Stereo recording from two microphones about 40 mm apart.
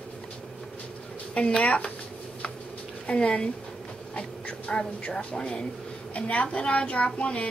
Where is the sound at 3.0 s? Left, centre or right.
Left.